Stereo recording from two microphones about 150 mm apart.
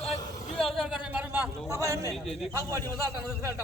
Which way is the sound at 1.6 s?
20° right (ahead or behind).